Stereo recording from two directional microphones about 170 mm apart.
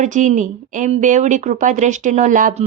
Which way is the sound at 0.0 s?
45° right (ahead or behind).